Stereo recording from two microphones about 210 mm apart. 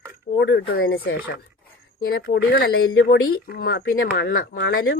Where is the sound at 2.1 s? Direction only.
50° left (ahead or behind).